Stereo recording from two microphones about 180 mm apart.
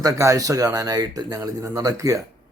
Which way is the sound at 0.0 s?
20° right (ahead or behind).